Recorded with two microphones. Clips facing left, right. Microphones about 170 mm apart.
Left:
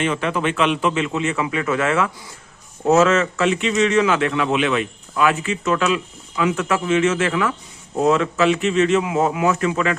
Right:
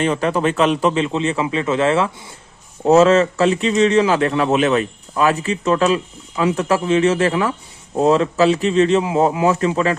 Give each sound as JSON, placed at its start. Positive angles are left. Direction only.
{"t": 0.0, "sound": "a man's voice", "side_deg": -35}